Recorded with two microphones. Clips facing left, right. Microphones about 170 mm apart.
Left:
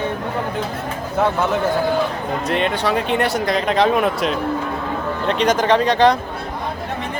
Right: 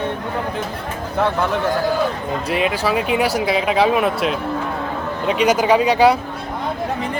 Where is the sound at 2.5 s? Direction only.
5° right (ahead or behind).